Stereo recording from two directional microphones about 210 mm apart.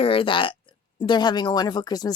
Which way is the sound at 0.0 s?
25° left (ahead or behind).